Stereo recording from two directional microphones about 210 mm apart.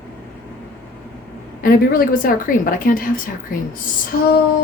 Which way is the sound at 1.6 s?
45° left (ahead or behind).